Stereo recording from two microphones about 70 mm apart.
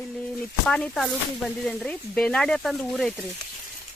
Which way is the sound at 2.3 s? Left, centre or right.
Centre.